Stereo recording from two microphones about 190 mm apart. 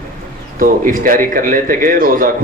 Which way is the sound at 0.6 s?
45° right (ahead or behind).